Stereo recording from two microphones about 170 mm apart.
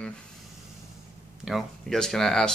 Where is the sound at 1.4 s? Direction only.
Centre (ahead or behind).